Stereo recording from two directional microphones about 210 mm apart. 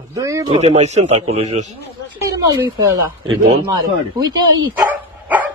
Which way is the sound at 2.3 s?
15° right (ahead or behind).